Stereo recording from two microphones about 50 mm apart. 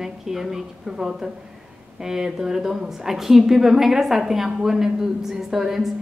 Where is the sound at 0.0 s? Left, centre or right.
Centre.